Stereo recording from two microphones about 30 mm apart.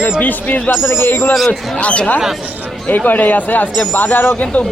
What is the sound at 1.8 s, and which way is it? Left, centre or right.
Speech, left.